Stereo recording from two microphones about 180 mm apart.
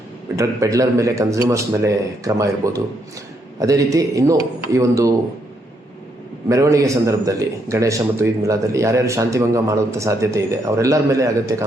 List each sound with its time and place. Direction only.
0.3 s a man's voice: 20° right (ahead or behind)
6.5 s a man's voice: 15° right (ahead or behind)